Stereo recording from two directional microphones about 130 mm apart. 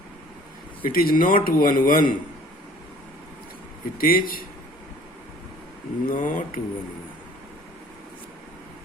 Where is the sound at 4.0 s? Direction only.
90° left.